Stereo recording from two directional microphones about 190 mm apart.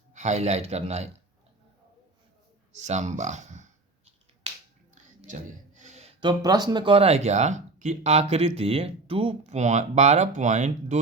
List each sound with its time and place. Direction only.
0.1 s speech: 40° right (ahead or behind)
2.7 s speech: 35° right (ahead or behind)
5.2 s gasp: 40° right (ahead or behind)
6.1 s speech: 20° right (ahead or behind); by 10.9 s 40° right (ahead or behind)